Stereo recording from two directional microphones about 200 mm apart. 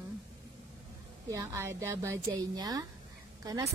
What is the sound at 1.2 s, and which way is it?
A woman's voice, 15° right (ahead or behind).